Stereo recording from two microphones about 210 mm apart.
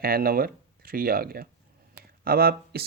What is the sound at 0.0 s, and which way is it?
Speech, 45° right (ahead or behind).